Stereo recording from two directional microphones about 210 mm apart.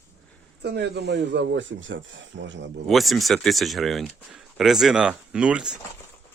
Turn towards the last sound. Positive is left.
turn(degrees=-5)  # may be behind; listen again after turning